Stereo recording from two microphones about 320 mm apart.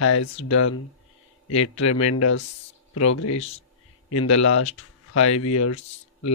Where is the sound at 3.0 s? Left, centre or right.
Left.